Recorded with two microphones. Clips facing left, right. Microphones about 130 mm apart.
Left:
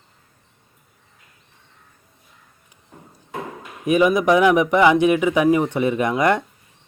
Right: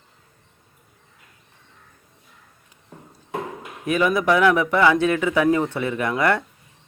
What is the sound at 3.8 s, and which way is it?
Speech, 15° left (ahead or behind).